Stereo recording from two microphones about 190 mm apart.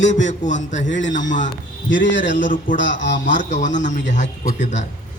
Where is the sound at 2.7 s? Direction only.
70° left (ahead or behind).